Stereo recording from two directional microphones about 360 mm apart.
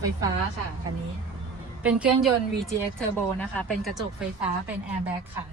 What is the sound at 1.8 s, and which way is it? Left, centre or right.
Speech, centre.